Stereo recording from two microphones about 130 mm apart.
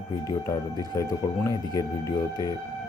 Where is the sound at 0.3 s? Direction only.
30° left (ahead or behind).